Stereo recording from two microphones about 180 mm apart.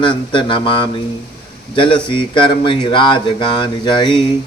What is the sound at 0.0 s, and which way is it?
Speech, 25° left (ahead or behind).